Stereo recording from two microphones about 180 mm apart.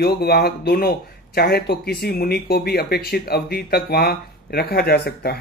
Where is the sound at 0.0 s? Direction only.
60° left (ahead or behind).